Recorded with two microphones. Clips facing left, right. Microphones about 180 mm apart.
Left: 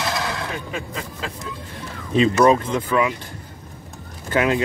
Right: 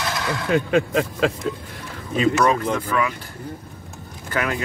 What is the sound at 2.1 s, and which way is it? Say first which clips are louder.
Speech: left 3 dB; 25° left (ahead or behind).